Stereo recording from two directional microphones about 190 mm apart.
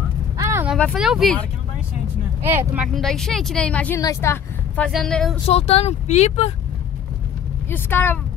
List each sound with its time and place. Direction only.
0.4 s vehicle: 15° right (ahead or behind)
0.7 s speech: centre (ahead or behind)
2.6 s speech: 10° right (ahead or behind)
2.9 s speech: centre (ahead or behind)
4.8 s speech: 5° left (ahead or behind)
5.5 s speech: 35° left (ahead or behind)
7.7 s speech: 10° left (ahead or behind)